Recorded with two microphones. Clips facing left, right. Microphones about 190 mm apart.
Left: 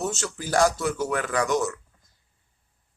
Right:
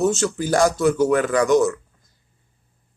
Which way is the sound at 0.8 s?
50° right (ahead or behind).